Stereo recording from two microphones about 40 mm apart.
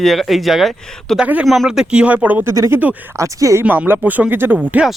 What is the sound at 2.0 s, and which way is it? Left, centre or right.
Speech, right.